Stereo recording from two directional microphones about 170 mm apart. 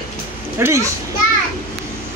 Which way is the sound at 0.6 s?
15° right (ahead or behind).